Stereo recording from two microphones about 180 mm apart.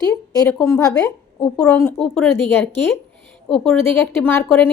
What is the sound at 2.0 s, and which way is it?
Speech, 5° left (ahead or behind).